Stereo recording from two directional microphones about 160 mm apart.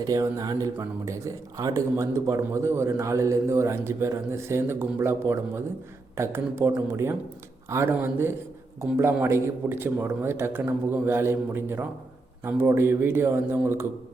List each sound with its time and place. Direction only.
0.0 s a man's voice: 20° right (ahead or behind)